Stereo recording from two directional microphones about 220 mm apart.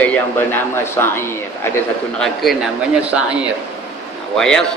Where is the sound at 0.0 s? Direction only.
5° left (ahead or behind).